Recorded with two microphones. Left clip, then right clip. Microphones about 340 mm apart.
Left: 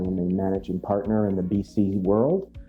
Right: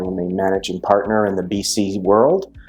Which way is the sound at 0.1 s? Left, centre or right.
Right.